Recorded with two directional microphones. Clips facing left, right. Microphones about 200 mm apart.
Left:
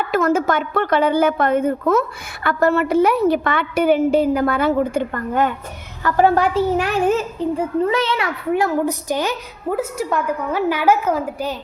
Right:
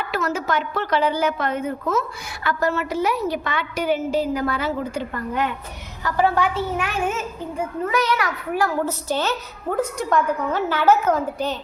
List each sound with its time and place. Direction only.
0.1 s a woman's voice: 50° left (ahead or behind); by 11.5 s 10° left (ahead or behind)